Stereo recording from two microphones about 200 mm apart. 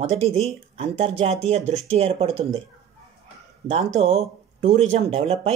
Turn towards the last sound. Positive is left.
turn(degrees=-30)  # may be behind; listen again after turning